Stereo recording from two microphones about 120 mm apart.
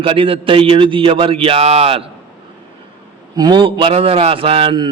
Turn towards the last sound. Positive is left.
turn(degrees=-45)  # may be behind; listen again after turning